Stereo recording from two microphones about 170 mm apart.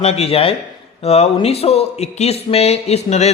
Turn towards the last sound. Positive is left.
turn(degrees=40)  # may be behind; listen again after turning